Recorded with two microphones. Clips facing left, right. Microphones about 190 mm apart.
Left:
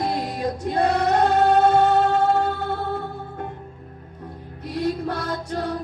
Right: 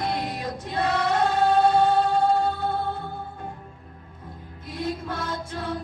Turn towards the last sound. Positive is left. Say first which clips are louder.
# left 5 dB
turn(degrees=40)  # may be behind; listen again after turning